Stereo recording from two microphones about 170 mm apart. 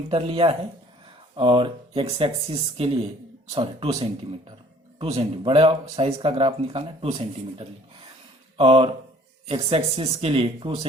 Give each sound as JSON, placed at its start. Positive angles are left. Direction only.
{"t": 0.1, "sound": "speech", "side_deg": -35}